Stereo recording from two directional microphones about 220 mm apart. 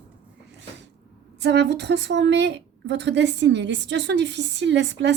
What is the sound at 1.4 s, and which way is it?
A woman's voice, 50° right (ahead or behind).